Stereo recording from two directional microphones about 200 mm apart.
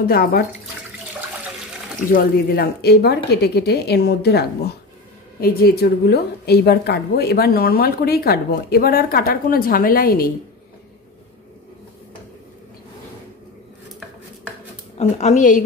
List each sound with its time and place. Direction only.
0.0 s a woman's voice: 50° left (ahead or behind)
2.0 s a woman's voice: 45° left (ahead or behind)
15.0 s a woman's voice: 35° left (ahead or behind)